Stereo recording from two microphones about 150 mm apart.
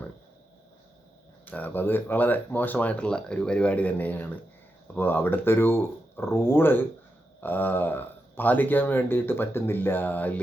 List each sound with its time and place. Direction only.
1.5 s speech: 10° left (ahead or behind)